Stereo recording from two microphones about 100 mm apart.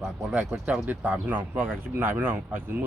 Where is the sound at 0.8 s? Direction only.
15° right (ahead or behind).